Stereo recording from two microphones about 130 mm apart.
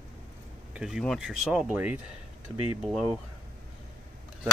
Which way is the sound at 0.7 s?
5° right (ahead or behind).